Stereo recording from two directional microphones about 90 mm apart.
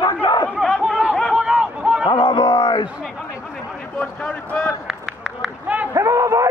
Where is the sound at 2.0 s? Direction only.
70° left (ahead or behind).